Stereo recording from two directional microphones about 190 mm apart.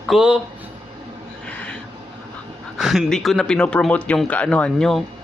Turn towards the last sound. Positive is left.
turn(degrees=0)  # may be behind; listen again after turning